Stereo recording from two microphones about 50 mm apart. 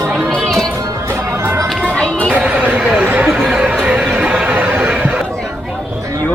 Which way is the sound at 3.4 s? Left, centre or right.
Centre.